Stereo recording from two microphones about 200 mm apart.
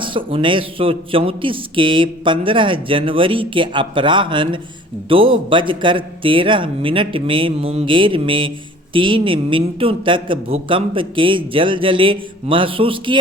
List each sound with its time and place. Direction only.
0.0 s a man's voice: 25° right (ahead or behind)